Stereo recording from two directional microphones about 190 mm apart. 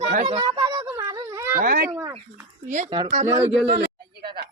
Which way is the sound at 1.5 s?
50° right (ahead or behind).